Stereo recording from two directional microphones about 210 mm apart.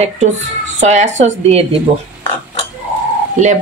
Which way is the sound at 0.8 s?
35° right (ahead or behind).